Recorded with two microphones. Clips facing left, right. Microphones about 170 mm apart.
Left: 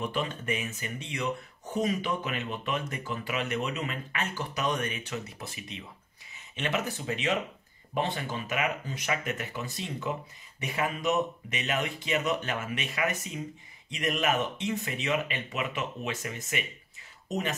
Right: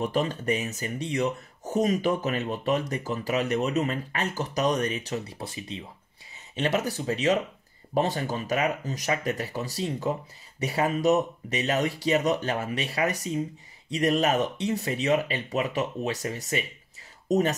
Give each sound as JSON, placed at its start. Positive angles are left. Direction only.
{"t": 0.0, "sound": "speech", "side_deg": -40}